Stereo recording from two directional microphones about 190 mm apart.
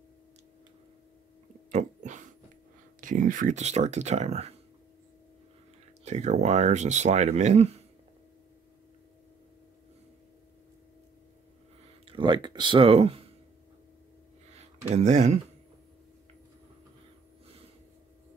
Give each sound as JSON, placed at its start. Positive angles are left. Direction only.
{"t": 1.7, "sound": "a sound", "side_deg": -40}
{"t": 3.0, "sound": "speech", "side_deg": -45}
{"t": 6.0, "sound": "speech", "side_deg": -35}
{"t": 12.1, "sound": "speech", "side_deg": -25}
{"t": 14.9, "sound": "speech", "side_deg": -35}